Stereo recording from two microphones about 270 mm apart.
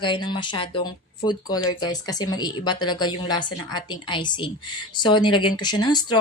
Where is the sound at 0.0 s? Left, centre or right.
Centre.